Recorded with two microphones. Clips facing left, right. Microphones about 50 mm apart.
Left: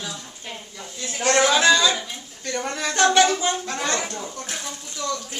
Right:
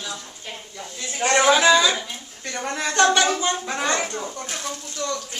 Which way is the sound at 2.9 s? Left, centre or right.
Centre.